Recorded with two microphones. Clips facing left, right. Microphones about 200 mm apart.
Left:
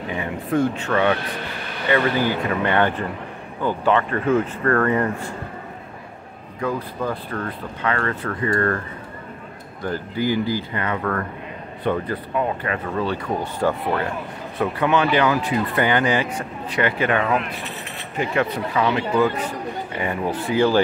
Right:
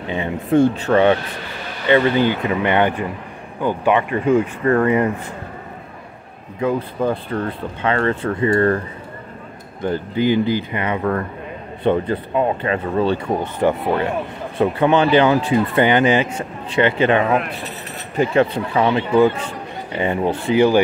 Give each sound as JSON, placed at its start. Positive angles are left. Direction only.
{"t": 0.1, "sound": "speech", "side_deg": -25}
{"t": 1.9, "sound": "speech", "side_deg": -20}
{"t": 6.6, "sound": "speech", "side_deg": -25}